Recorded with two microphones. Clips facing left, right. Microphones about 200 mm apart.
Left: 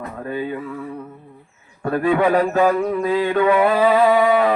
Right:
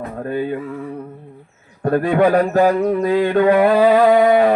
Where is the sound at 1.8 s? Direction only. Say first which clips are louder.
Right 3 dB; 45° right (ahead or behind).